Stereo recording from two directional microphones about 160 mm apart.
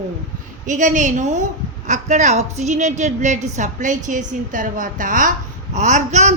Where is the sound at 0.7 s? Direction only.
50° right (ahead or behind).